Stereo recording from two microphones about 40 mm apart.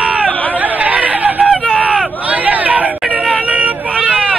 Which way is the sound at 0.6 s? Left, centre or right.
Right.